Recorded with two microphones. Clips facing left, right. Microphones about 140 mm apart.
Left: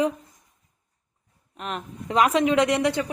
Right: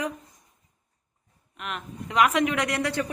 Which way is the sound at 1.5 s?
35° left (ahead or behind).